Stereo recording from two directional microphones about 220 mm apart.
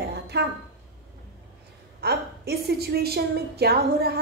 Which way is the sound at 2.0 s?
45° right (ahead or behind).